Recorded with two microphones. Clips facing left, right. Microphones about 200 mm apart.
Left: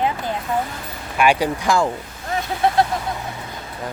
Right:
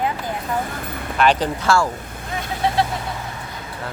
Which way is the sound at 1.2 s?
10° left (ahead or behind).